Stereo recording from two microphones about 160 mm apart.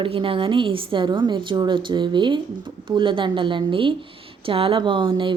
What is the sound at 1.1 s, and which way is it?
Speech, 25° right (ahead or behind).